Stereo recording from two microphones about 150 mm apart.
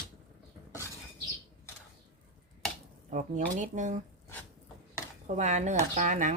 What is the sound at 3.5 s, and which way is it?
Speech, 55° right (ahead or behind).